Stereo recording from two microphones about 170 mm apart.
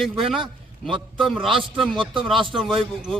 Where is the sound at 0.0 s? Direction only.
Centre (ahead or behind).